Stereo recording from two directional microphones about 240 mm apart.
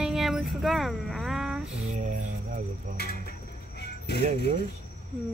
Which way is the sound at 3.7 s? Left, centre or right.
Left.